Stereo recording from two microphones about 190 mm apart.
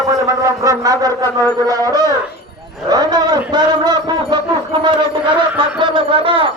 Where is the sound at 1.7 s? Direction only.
20° right (ahead or behind).